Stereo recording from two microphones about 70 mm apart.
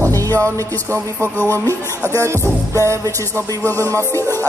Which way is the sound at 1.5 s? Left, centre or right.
Right.